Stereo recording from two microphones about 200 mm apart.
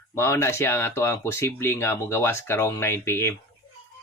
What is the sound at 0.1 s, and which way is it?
Speech, 15° left (ahead or behind).